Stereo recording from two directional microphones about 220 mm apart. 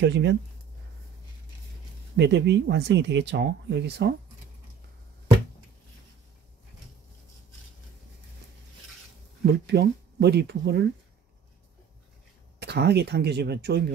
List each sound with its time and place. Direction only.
0.0 s speech: 50° right (ahead or behind)
2.1 s speech: 55° right (ahead or behind)
9.5 s speech: 50° right (ahead or behind)
12.5 s speech: 50° right (ahead or behind)